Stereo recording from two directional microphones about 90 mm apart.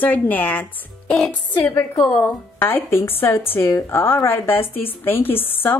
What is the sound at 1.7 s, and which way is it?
Speech, 45° left (ahead or behind).